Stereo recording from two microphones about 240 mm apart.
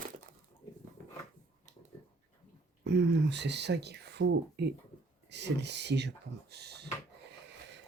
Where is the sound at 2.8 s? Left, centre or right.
Right.